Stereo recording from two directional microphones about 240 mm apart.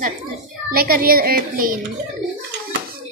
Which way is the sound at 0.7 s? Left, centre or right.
Right.